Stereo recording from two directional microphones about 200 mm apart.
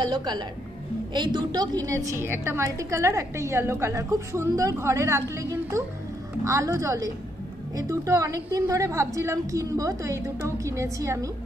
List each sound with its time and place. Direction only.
0.0 s a woman's voice: 20° right (ahead or behind)